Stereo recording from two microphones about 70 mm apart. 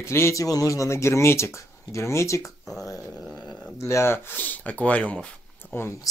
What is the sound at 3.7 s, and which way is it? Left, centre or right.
Speech, left.